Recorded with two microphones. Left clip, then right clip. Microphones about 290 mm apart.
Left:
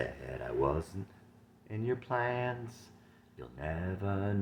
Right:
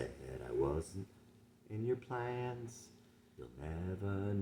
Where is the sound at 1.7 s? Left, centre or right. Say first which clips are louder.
Left 5 dB; centre.